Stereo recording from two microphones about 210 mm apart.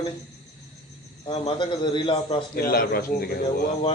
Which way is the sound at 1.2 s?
25° left (ahead or behind).